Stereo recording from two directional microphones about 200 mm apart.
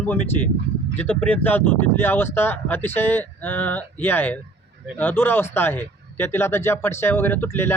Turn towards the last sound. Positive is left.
turn(degrees=10)  # may be behind; listen again after turning